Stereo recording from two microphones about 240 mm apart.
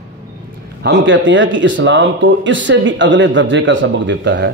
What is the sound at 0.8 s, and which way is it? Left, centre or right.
Speech, right.